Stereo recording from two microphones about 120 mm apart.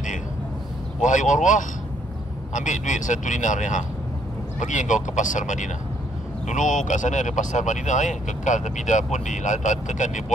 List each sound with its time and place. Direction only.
1.0 s speech: 90° left